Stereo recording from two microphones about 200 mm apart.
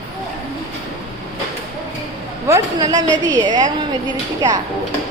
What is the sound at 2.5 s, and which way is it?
A man's voice, 15° right (ahead or behind).